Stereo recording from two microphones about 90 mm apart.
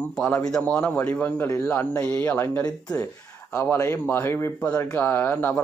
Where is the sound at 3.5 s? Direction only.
30° left (ahead or behind).